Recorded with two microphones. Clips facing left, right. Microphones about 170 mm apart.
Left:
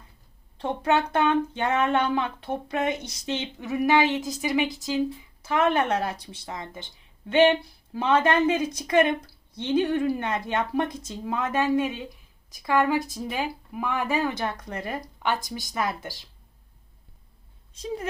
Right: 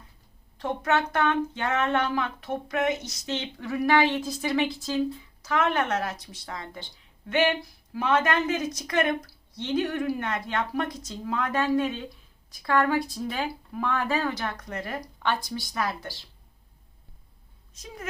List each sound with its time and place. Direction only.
0.6 s a woman's voice: 30° left (ahead or behind)
5.4 s a woman's voice: 25° left (ahead or behind)
17.7 s a woman's voice: 30° left (ahead or behind)